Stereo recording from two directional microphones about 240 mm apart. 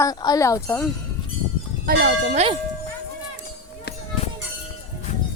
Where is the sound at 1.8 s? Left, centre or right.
Right.